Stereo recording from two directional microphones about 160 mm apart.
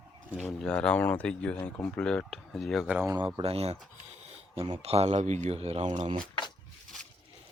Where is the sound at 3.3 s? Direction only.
40° right (ahead or behind).